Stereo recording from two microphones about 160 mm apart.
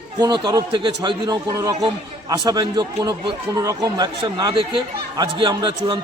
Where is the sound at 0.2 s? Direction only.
30° right (ahead or behind).